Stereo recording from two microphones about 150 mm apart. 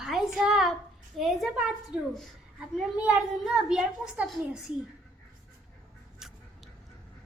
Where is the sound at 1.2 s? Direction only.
Centre (ahead or behind).